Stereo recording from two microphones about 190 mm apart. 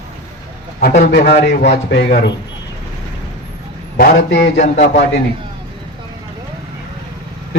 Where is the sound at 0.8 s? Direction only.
50° left (ahead or behind).